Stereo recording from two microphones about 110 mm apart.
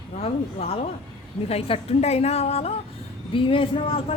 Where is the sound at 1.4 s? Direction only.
65° left (ahead or behind).